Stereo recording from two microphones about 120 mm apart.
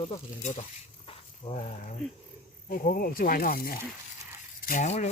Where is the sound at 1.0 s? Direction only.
55° left (ahead or behind).